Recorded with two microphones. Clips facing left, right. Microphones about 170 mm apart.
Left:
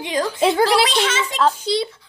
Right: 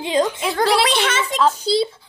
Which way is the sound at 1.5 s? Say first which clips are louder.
Right 3 dB; 35° right (ahead or behind).